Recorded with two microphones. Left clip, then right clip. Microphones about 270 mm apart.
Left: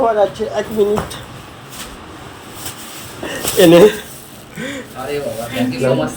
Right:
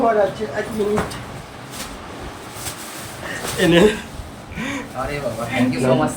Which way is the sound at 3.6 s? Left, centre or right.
Centre.